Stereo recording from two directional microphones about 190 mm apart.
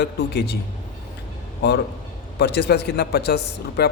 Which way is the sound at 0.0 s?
60° left (ahead or behind).